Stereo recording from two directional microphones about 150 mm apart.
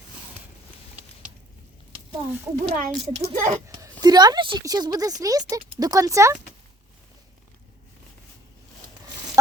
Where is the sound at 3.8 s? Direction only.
25° right (ahead or behind).